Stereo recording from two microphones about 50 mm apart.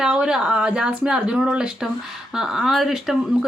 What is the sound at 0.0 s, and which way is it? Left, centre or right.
Speech, centre.